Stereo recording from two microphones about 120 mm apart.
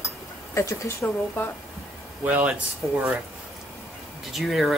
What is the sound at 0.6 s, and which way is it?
Speech, 25° left (ahead or behind).